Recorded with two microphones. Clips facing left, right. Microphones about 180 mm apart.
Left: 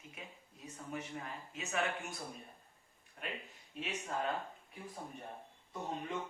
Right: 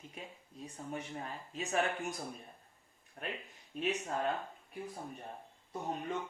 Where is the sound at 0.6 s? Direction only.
30° right (ahead or behind).